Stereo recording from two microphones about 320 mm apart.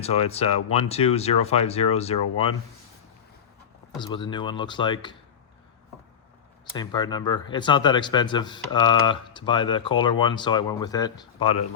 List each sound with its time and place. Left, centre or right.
0.0 s speech: centre
3.9 s speech: centre
6.7 s speech: centre